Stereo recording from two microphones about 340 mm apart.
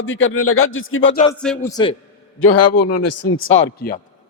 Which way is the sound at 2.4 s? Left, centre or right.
Left.